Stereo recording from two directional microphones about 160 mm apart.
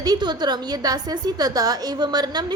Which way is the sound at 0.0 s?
25° right (ahead or behind).